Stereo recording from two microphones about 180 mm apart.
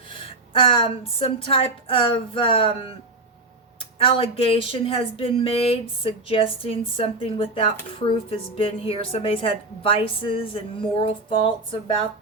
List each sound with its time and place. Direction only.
0.1 s speech: 30° left (ahead or behind)
3.9 s speech: 30° left (ahead or behind)